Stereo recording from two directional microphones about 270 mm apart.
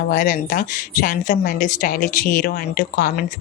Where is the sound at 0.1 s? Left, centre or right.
Left.